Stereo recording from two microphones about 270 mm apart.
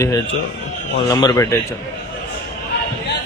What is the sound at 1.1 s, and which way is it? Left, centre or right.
Speech, centre.